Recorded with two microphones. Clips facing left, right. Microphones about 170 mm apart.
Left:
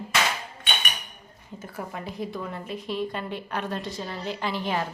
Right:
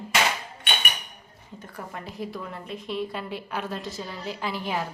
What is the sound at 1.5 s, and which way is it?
A woman's voice, 5° left (ahead or behind).